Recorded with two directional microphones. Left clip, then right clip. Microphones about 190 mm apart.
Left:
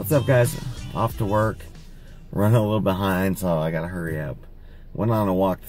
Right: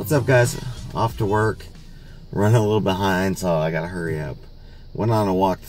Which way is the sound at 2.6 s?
10° left (ahead or behind).